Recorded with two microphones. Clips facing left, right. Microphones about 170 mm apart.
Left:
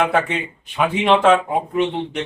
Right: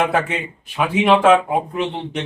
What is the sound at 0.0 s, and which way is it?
Speech, centre (ahead or behind).